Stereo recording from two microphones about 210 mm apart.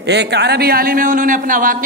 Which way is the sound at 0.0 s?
55° right (ahead or behind).